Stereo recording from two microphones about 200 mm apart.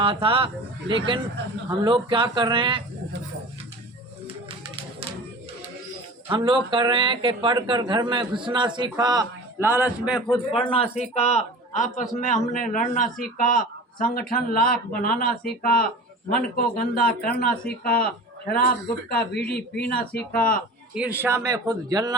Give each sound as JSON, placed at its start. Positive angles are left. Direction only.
{"t": 0.0, "sound": "speech", "side_deg": -25}
{"t": 6.2, "sound": "speech", "side_deg": -25}
{"t": 10.7, "sound": "a man's voice", "side_deg": 30}
{"t": 20.9, "sound": "speech", "side_deg": -5}